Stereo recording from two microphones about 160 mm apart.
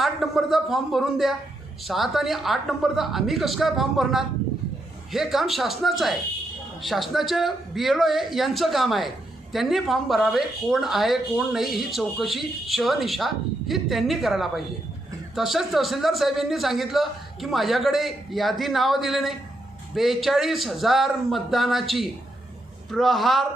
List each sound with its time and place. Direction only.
0.0 s a man's voice: centre (ahead or behind)